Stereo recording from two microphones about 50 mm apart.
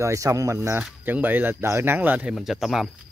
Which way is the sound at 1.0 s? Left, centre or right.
Right.